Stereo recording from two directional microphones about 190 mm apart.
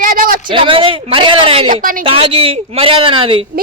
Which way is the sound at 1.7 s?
45° right (ahead or behind).